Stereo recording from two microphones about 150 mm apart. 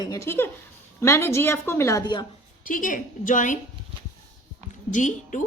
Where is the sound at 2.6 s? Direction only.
65° left (ahead or behind).